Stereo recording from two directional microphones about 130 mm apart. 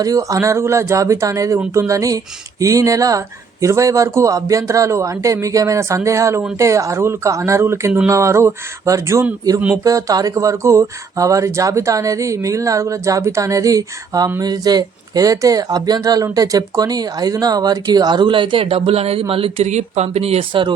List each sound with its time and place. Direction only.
0.0 s speech: 25° right (ahead or behind)